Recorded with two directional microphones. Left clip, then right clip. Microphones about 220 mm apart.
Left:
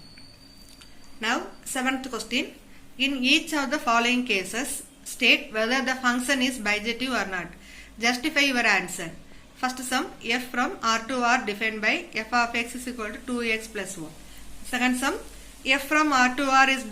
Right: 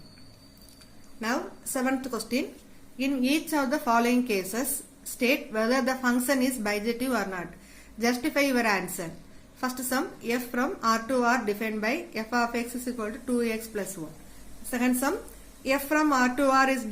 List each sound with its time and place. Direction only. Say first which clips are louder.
1.2 s a woman's voice: left 3 dB; 40° right (ahead or behind)